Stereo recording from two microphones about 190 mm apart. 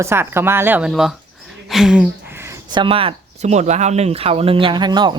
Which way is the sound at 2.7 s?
25° right (ahead or behind).